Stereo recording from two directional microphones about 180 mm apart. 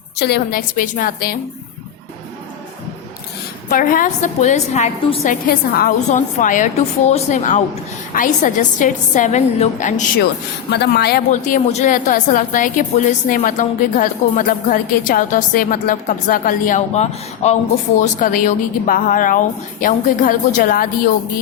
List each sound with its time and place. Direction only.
0.2 s a woman's voice: 65° left (ahead or behind)
3.7 s a woman's voice: 50° left (ahead or behind)
6.1 s a woman's voice: 45° left (ahead or behind)
10.7 s a woman's voice: 65° left (ahead or behind)
11.3 s a woman's voice: 45° left (ahead or behind)